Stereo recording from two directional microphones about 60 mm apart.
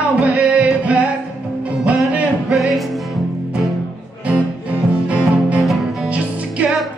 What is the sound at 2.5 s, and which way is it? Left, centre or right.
Music, centre.